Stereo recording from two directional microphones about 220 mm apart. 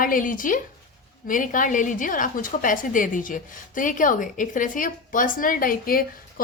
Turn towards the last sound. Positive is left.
turn(degrees=40)  # may be behind; listen again after turning